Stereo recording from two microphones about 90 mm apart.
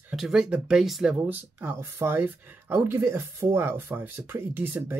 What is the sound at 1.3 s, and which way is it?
Speech, 25° right (ahead or behind).